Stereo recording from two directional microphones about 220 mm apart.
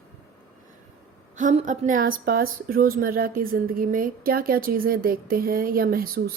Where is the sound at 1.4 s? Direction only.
35° right (ahead or behind).